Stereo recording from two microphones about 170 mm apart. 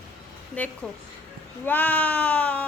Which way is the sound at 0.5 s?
10° left (ahead or behind).